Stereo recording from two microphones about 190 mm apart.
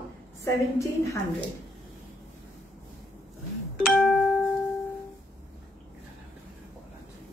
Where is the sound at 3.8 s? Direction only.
Centre (ahead or behind).